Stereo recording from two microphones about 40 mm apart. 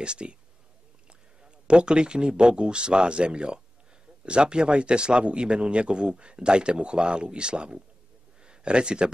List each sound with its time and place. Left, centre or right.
0.0 s a man's voice: right
1.4 s a man's voice: right
8.4 s a sound: right